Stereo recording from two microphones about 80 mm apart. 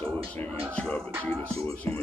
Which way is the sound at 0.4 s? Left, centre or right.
Centre.